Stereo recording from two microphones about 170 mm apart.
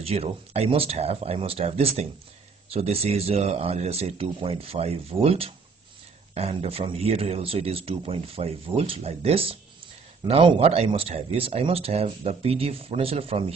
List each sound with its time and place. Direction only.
0.0 s speech: 35° right (ahead or behind)